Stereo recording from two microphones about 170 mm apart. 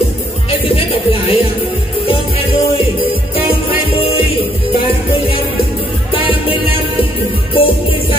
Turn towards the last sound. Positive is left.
turn(degrees=30)  # may be behind; listen again after turning